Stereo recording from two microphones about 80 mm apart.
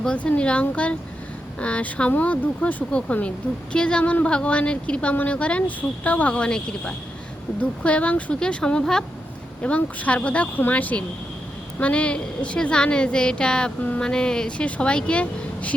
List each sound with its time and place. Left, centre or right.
0.0 s speech: centre